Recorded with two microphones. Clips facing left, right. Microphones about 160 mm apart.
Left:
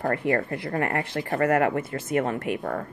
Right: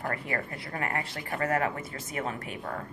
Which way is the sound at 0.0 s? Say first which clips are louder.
Left 9 dB; 55° left (ahead or behind).